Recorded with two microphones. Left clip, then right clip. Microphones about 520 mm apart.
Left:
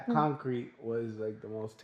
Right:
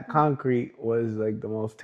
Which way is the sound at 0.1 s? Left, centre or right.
Right.